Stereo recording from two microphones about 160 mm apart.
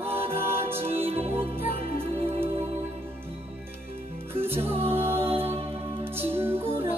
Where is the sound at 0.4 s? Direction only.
15° right (ahead or behind).